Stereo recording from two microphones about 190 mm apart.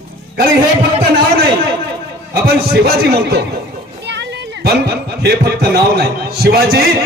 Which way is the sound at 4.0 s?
65° right (ahead or behind).